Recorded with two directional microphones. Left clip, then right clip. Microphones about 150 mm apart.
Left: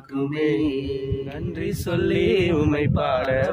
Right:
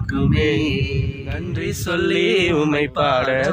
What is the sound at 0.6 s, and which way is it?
Mantra, 20° left (ahead or behind).